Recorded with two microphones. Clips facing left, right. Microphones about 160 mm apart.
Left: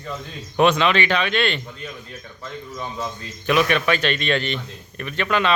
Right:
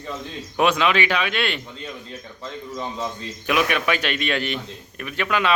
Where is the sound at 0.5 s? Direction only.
5° right (ahead or behind).